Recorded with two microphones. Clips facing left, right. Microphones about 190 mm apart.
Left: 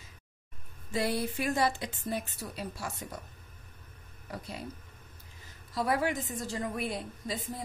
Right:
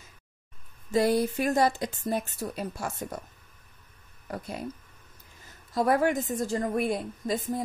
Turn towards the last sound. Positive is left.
turn(degrees=-50)  # may be behind; listen again after turning